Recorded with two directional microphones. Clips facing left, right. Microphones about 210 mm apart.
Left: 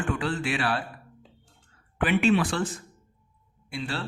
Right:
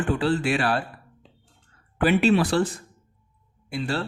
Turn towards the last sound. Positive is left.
turn(degrees=-40)  # may be behind; listen again after turning